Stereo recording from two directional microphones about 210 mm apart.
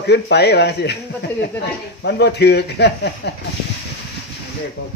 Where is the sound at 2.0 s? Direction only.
55° left (ahead or behind).